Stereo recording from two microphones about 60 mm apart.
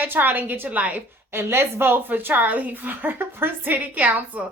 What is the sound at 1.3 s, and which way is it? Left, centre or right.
A woman's voice, right.